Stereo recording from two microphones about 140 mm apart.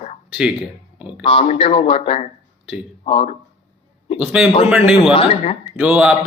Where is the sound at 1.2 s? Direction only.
40° left (ahead or behind).